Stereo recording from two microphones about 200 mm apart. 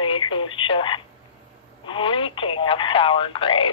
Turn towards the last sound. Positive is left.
turn(degrees=25)  # may be behind; listen again after turning